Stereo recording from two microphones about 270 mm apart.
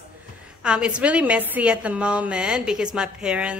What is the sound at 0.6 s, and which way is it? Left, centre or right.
A woman's voice, centre.